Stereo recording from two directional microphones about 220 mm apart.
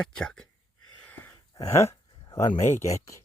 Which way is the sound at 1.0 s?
10° left (ahead or behind).